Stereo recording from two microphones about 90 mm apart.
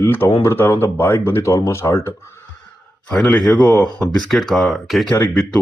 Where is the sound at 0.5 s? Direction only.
25° left (ahead or behind).